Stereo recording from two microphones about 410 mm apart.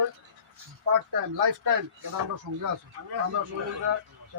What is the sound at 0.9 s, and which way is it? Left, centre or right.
Speech, right.